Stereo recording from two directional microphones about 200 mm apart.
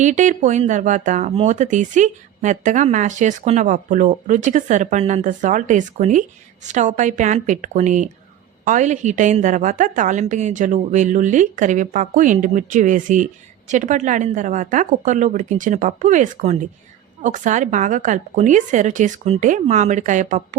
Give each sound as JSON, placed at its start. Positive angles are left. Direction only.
{"t": 0.0, "sound": "speech", "side_deg": -40}